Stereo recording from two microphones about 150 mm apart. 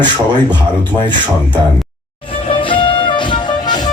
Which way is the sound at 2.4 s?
35° left (ahead or behind).